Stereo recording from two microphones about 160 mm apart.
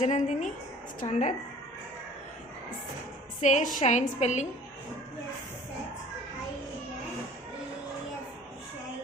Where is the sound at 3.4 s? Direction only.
50° left (ahead or behind).